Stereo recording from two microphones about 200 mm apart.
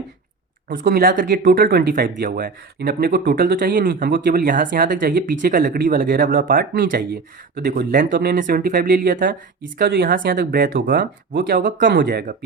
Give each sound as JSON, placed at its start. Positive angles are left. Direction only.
{"t": 0.9, "sound": "speech", "side_deg": -45}